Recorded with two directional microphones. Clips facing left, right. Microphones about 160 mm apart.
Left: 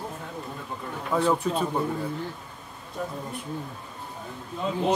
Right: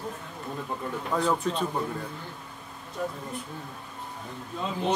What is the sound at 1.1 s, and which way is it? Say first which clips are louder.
Speech: left 3 dB; 5° left (ahead or behind).